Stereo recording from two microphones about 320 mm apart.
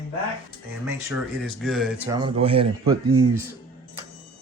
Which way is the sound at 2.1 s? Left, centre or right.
Centre.